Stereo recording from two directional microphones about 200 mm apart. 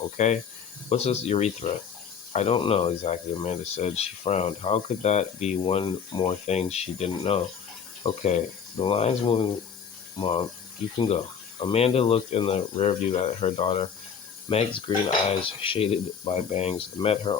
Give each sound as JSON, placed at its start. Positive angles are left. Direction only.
{"t": 0.2, "sound": "speech", "side_deg": 35}